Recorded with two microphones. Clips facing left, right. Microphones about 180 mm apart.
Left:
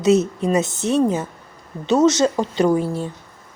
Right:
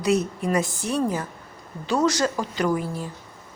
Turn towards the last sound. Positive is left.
turn(degrees=30)  # may be behind; listen again after turning